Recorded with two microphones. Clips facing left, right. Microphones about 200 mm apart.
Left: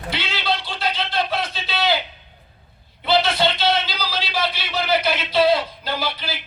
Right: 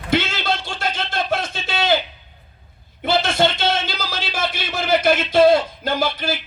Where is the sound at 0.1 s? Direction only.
45° right (ahead or behind).